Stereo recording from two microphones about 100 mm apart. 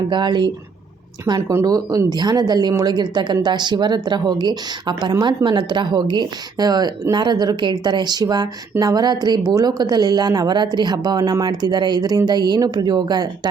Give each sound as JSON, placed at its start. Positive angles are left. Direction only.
{"t": 0.1, "sound": "a woman's voice", "side_deg": -50}
{"t": 1.4, "sound": "a woman's voice", "side_deg": -30}